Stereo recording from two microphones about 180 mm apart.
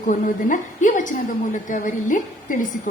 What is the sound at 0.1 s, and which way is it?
A woman's voice, 45° left (ahead or behind).